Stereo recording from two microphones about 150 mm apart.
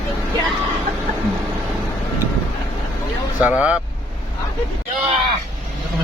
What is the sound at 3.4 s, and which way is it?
Speech, 10° right (ahead or behind).